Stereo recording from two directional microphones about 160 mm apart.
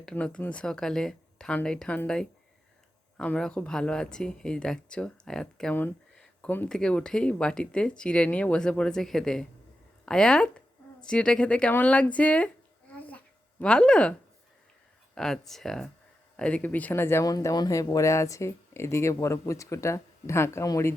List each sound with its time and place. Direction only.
0.0 s speech: 5° left (ahead or behind)
12.9 s a sound: 10° left (ahead or behind)
15.1 s speech: centre (ahead or behind); by 20.9 s 20° left (ahead or behind)